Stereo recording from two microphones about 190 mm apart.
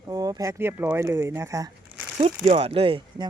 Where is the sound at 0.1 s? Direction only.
20° right (ahead or behind).